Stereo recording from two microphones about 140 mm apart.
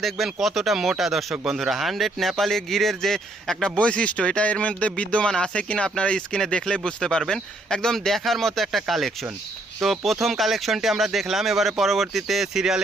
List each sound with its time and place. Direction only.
0.0 s speech: centre (ahead or behind)